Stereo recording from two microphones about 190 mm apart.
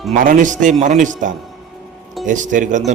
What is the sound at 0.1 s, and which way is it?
Speech, 45° right (ahead or behind).